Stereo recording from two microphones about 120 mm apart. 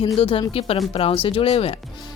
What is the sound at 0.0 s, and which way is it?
A woman's voice, 45° left (ahead or behind).